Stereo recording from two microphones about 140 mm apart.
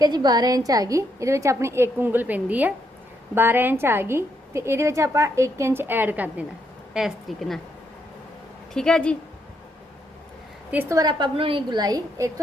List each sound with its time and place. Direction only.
0.0 s a woman's voice: 30° right (ahead or behind); by 6.4 s 10° right (ahead or behind)
6.9 s a woman's voice: centre (ahead or behind)
8.7 s a woman's voice: 5° left (ahead or behind)
10.7 s a woman's voice: 15° right (ahead or behind)
11.2 s a woman's voice: 40° right (ahead or behind)